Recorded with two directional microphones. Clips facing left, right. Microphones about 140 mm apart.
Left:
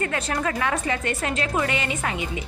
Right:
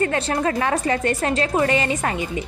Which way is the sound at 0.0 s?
30° right (ahead or behind).